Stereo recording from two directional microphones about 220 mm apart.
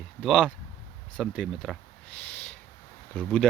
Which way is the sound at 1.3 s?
Centre (ahead or behind).